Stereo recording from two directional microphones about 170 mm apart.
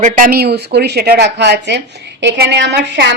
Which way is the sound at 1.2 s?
80° right.